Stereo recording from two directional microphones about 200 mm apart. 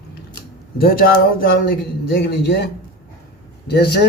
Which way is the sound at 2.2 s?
55° left (ahead or behind).